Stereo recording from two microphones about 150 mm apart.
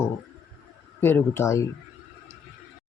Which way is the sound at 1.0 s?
15° left (ahead or behind).